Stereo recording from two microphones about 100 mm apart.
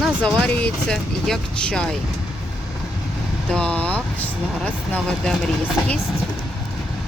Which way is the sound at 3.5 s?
10° left (ahead or behind).